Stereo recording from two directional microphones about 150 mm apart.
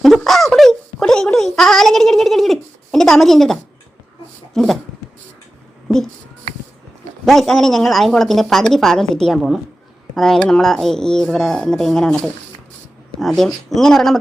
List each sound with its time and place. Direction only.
0.0 s a sound: centre (ahead or behind)
4.5 s speech: centre (ahead or behind)
7.3 s speech: centre (ahead or behind)